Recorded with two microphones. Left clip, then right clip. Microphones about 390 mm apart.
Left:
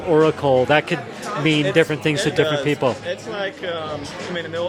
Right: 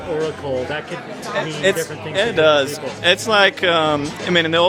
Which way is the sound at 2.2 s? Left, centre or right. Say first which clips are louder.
Right 8 dB; right.